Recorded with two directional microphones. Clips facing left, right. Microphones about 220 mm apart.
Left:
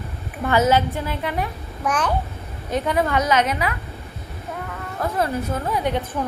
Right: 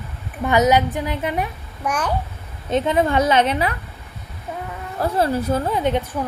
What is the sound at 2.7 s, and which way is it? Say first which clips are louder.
A child's voice: right 3 dB; 25° right (ahead or behind).